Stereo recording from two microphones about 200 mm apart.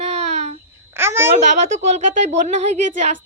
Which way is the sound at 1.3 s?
35° right (ahead or behind).